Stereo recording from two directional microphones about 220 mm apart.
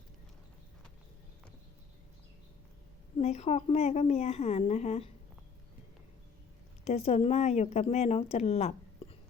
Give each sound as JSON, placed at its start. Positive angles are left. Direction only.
{"t": 3.2, "sound": "speech", "side_deg": 30}
{"t": 6.8, "sound": "speech", "side_deg": 30}